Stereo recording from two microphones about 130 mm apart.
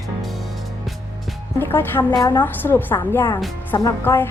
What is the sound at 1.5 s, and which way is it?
Speech, 15° left (ahead or behind).